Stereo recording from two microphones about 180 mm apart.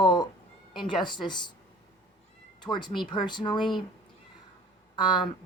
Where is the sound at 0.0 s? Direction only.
25° left (ahead or behind).